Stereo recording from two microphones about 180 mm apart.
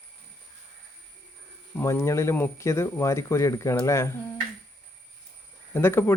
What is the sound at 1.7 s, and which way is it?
Speech, 15° left (ahead or behind).